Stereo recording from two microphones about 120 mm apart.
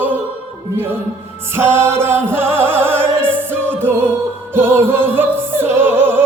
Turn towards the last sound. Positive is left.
turn(degrees=-20)  # may be behind; listen again after turning